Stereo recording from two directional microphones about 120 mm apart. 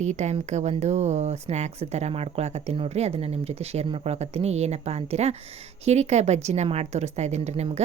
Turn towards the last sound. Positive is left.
turn(degrees=-65)  # may be behind; listen again after turning